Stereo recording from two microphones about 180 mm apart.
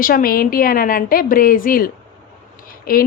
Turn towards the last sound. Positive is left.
turn(degrees=55)  # may be behind; listen again after turning